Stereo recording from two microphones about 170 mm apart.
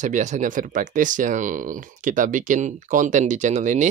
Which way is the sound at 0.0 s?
45° right (ahead or behind).